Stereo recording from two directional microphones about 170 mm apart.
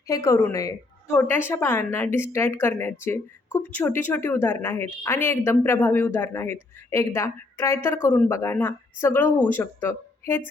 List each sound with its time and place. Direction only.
0.1 s a woman's voice: 20° left (ahead or behind)